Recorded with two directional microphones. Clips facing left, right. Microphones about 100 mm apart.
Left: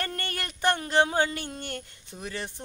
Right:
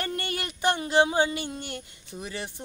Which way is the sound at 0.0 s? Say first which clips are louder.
Right 2 dB; 10° right (ahead or behind).